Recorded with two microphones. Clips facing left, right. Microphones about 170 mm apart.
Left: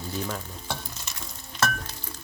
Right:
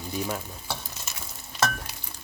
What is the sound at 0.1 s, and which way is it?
Stir, 10° right (ahead or behind).